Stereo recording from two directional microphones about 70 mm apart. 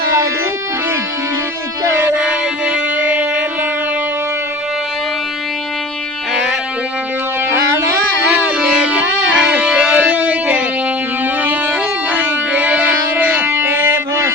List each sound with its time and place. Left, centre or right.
2.1 s music: centre
7.5 s music: right
8.4 s music: right
12.1 s music: right